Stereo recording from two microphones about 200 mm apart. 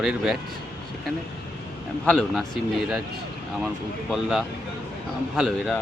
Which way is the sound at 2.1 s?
Centre (ahead or behind).